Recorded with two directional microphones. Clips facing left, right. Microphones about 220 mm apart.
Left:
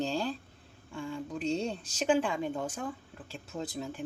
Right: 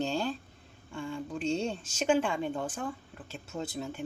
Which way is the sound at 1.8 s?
35° left (ahead or behind).